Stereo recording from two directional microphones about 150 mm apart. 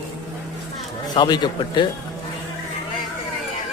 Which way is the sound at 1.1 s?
30° left (ahead or behind).